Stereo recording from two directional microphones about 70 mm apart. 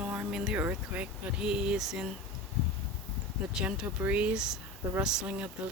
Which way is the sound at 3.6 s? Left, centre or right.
Centre.